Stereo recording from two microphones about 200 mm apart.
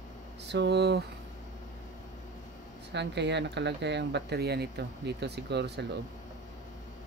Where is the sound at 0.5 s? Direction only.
60° right (ahead or behind).